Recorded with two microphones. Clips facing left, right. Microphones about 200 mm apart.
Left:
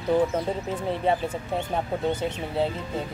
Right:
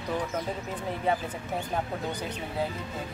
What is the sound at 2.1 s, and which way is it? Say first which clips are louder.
Speech: left 6 dB; 25° left (ahead or behind).